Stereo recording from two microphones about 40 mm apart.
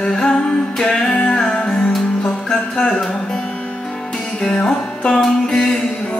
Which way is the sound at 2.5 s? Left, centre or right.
Centre.